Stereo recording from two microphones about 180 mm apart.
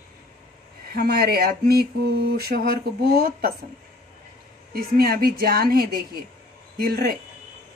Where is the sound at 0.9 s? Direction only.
60° right (ahead or behind).